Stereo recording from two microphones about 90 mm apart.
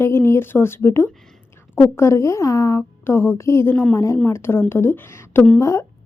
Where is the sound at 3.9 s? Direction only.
35° left (ahead or behind).